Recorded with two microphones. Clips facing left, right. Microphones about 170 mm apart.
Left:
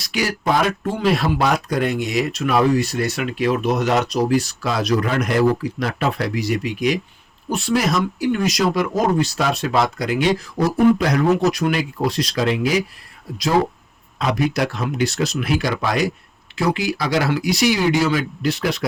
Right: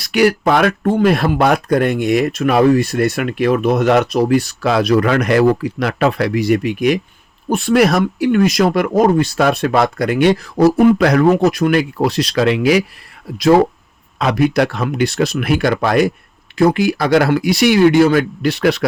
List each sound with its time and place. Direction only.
0.0 s speech: 60° right (ahead or behind)
14.2 s speech: 65° right (ahead or behind)